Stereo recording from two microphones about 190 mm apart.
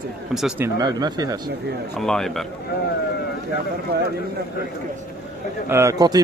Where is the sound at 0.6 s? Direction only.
20° right (ahead or behind).